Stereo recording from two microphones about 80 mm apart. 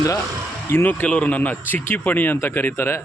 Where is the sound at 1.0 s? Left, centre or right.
Centre.